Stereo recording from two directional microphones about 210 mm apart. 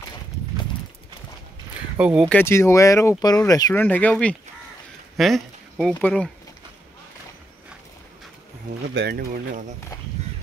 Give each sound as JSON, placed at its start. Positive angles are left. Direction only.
{"t": 2.0, "sound": "speech", "side_deg": -5}
{"t": 2.3, "sound": "speech", "side_deg": 10}
{"t": 8.9, "sound": "speech", "side_deg": -50}